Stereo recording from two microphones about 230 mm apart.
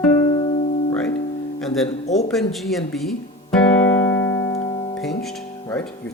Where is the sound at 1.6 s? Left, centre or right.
Centre.